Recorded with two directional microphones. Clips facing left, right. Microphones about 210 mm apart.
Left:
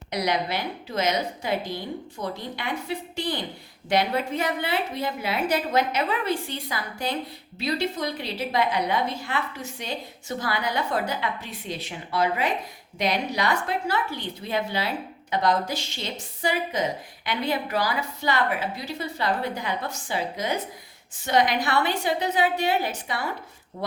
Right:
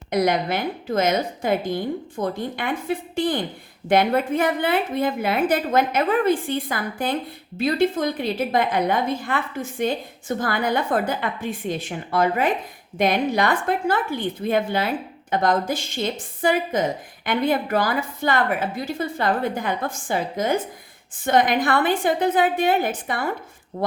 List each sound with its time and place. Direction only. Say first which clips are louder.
0.1 s a woman's voice: right 5 dB; 50° right (ahead or behind)